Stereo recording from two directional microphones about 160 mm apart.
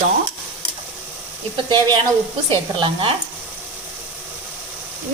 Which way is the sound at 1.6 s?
30° right (ahead or behind).